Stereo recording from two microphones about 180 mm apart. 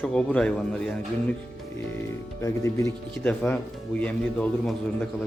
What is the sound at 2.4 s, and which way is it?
Speech, 15° left (ahead or behind).